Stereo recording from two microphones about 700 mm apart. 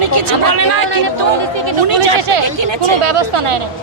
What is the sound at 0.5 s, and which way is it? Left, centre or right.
Speech, right.